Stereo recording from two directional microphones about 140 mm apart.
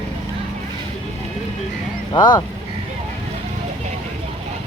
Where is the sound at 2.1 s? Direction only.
30° left (ahead or behind).